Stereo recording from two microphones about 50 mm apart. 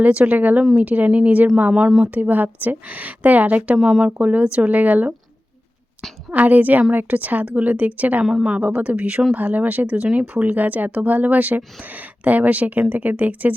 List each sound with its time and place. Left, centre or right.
0.0 s speech: right
6.3 s speech: right
8.2 s a woman's voice: centre
8.6 s speech: right